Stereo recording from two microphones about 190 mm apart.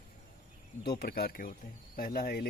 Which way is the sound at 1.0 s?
55° left (ahead or behind).